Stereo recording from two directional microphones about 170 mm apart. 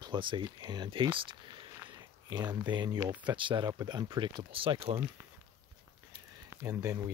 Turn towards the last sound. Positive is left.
turn(degrees=-20)  # may be behind; listen again after turning